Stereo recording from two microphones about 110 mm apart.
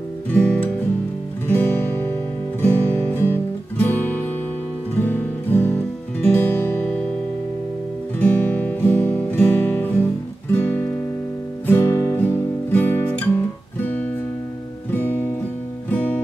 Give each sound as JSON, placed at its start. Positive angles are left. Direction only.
{"t": 0.3, "sound": "music", "side_deg": 15}
{"t": 8.2, "sound": "music", "side_deg": 15}
{"t": 10.5, "sound": "guitar", "side_deg": 15}
{"t": 11.6, "sound": "music", "side_deg": 20}